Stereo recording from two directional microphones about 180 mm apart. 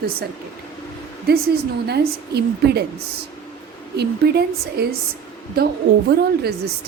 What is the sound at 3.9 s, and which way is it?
A woman's voice, 65° right (ahead or behind).